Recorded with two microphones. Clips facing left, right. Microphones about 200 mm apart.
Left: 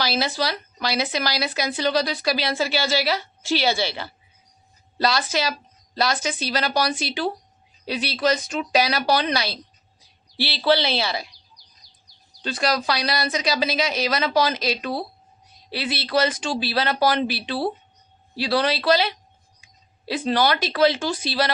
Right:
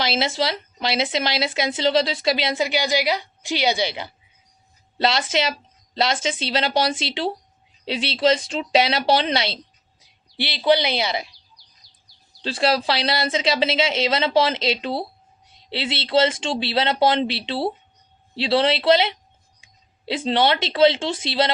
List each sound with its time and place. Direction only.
0.0 s a woman's voice: 25° right (ahead or behind)
12.4 s a woman's voice: 30° right (ahead or behind)